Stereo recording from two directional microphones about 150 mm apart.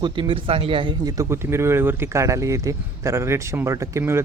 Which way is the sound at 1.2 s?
15° right (ahead or behind).